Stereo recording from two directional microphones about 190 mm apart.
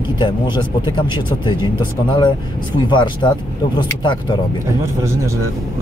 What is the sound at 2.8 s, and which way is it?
Speech, 25° left (ahead or behind).